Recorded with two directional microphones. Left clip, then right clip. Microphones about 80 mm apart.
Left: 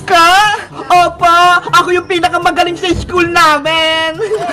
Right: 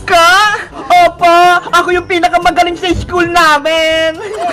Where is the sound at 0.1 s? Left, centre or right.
Right.